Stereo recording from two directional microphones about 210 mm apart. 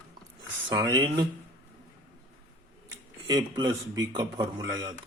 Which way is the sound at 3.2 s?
20° right (ahead or behind).